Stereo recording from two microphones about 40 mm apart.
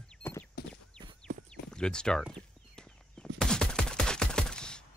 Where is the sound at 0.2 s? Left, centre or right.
Left.